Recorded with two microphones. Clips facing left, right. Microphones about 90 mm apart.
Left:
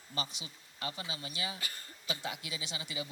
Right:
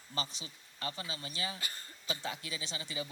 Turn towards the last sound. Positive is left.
turn(degrees=-35)  # may be behind; listen again after turning